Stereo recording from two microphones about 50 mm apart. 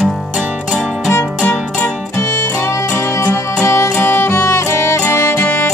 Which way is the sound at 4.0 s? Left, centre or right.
Left.